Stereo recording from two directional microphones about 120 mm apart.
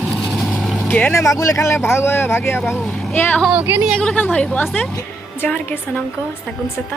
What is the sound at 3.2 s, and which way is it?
Speech, 20° left (ahead or behind).